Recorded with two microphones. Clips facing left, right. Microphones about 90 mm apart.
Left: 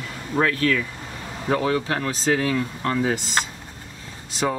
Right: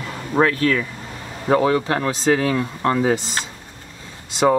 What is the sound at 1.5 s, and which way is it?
Speech, 30° right (ahead or behind).